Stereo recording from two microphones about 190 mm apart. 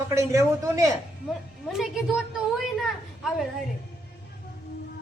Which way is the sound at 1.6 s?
Centre (ahead or behind).